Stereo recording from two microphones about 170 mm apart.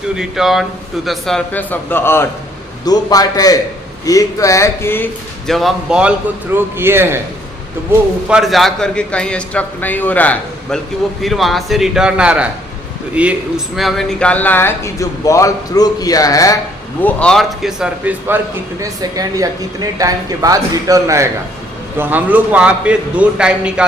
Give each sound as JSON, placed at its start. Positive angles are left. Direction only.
{"t": 0.2, "sound": "a man's voice", "side_deg": 0}
{"t": 5.5, "sound": "a man's voice", "side_deg": 0}
{"t": 8.3, "sound": "a man's voice", "side_deg": 0}
{"t": 17.0, "sound": "a man's voice", "side_deg": 10}
{"t": 18.8, "sound": "a man's voice", "side_deg": -20}